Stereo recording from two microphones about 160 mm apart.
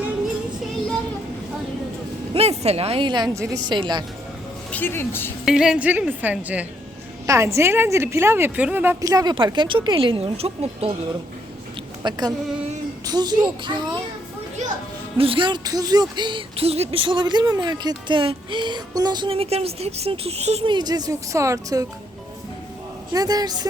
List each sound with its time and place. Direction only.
2.3 s a woman's voice: 40° right (ahead or behind)
4.7 s speech: 15° left (ahead or behind)
5.5 s a woman's voice: 5° right (ahead or behind); by 10.9 s 40° right (ahead or behind)
12.0 s a woman's voice: 25° right (ahead or behind)
14.6 s speech: 45° right (ahead or behind)
15.2 s speech: 35° right (ahead or behind)
20.7 s a woman's voice: 25° right (ahead or behind)
23.1 s a woman's voice: 25° right (ahead or behind)